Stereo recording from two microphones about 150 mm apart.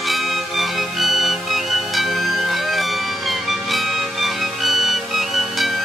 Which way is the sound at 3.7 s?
Centre (ahead or behind).